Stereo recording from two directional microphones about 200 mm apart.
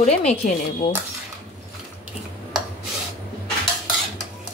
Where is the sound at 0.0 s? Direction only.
35° left (ahead or behind).